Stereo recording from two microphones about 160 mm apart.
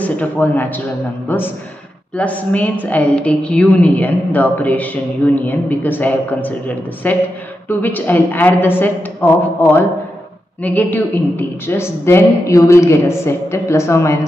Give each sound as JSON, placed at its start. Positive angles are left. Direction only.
{"t": 0.0, "sound": "a woman's voice", "side_deg": 10}
{"t": 2.1, "sound": "a woman's voice", "side_deg": 10}